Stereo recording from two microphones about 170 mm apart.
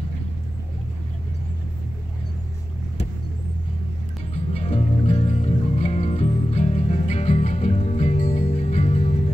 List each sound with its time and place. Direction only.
4.3 s music: 40° left (ahead or behind)